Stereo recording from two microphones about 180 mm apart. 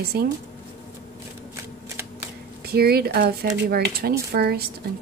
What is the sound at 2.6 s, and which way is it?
A woman's voice, 60° right (ahead or behind).